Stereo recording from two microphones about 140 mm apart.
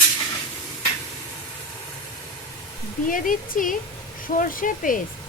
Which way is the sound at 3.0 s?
75° left (ahead or behind).